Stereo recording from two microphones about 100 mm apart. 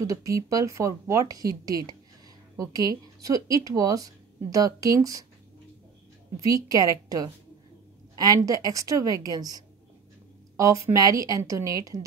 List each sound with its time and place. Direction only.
0.0 s speech: 35° right (ahead or behind)
6.5 s speech: 35° right (ahead or behind)